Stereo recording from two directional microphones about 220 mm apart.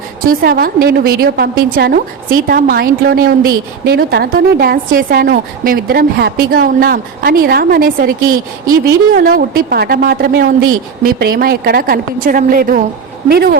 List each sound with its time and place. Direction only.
0.3 s a woman's voice: 40° right (ahead or behind)
9.1 s a woman's voice: 45° right (ahead or behind)